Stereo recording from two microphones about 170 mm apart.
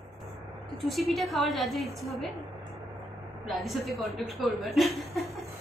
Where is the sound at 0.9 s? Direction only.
Centre (ahead or behind).